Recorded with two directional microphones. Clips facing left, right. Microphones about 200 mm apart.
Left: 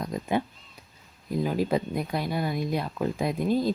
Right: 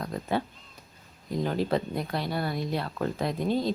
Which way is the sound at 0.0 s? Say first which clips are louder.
Left 2 dB; 15° left (ahead or behind).